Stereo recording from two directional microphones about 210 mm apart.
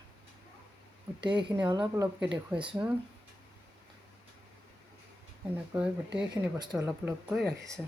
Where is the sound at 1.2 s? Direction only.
20° right (ahead or behind).